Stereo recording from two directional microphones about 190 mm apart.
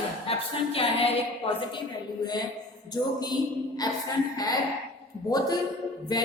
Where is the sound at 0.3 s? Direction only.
30° left (ahead or behind).